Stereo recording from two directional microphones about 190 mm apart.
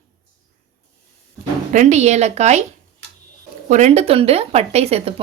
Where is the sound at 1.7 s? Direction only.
40° right (ahead or behind).